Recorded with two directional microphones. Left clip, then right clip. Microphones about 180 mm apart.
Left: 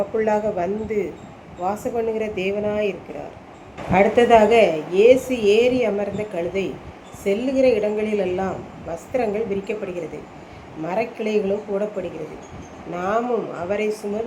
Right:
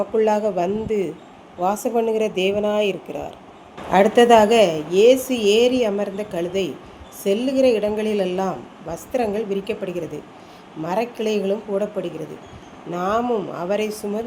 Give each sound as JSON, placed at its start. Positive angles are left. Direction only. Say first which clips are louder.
{"t": 0.2, "sound": "a woman's voice", "louder": "right 3 dB", "side_deg": -45}
{"t": 3.9, "sound": "a woman's voice", "louder": "right 1 dB", "side_deg": -45}
{"t": 12.9, "sound": "speech", "louder": "right 1 dB", "side_deg": -40}